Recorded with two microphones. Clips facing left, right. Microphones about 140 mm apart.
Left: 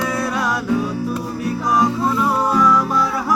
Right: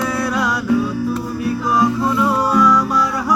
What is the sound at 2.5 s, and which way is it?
Music, 25° left (ahead or behind).